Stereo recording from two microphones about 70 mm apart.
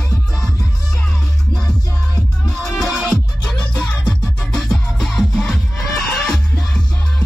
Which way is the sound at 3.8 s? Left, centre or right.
Left.